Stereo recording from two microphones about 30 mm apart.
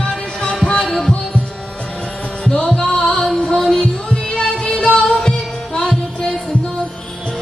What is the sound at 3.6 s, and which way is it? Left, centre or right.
Music, left.